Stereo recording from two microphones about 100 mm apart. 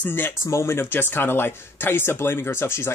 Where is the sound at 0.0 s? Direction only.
20° left (ahead or behind).